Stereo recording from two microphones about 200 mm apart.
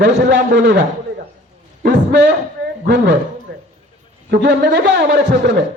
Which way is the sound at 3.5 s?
55° right (ahead or behind).